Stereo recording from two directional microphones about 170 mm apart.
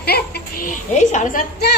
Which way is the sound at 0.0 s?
65° left (ahead or behind).